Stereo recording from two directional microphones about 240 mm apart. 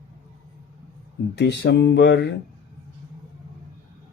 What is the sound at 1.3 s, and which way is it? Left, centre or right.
Speech, left.